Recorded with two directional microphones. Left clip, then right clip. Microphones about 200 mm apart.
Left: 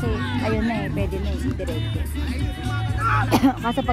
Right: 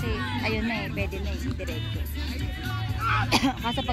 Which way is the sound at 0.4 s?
50° left (ahead or behind).